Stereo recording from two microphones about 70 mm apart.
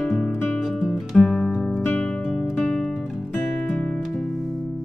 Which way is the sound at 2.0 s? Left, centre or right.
Centre.